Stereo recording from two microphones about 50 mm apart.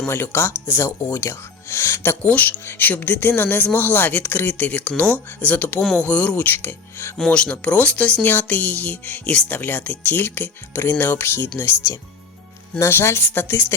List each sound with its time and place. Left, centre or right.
0.1 s speech: left
2.2 s speech: left
6.5 s speech: left
7.3 s speech: left
12.9 s speech: left